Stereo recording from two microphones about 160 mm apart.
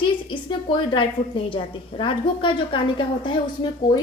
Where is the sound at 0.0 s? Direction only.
30° left (ahead or behind).